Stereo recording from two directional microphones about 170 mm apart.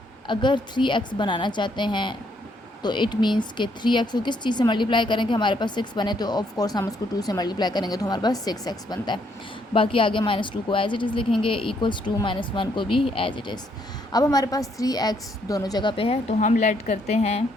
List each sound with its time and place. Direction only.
0.3 s a woman's voice: 25° left (ahead or behind)